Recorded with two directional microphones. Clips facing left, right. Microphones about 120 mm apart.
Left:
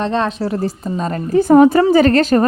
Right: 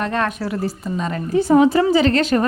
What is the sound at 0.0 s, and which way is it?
A woman's voice, 25° left (ahead or behind).